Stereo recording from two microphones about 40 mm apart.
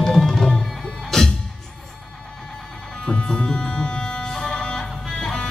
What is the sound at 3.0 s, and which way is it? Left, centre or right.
Music, left.